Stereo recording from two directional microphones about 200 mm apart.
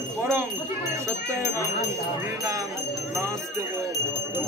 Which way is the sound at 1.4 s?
15° left (ahead or behind).